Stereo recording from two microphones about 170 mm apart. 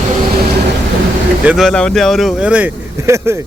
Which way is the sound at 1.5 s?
Centre (ahead or behind).